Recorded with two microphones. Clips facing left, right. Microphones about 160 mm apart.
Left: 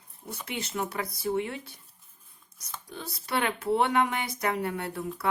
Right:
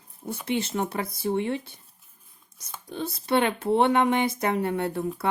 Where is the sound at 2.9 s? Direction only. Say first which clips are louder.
Right 8 dB; 25° right (ahead or behind).